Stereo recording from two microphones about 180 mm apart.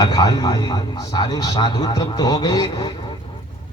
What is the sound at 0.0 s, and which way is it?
A man's voice, 20° left (ahead or behind).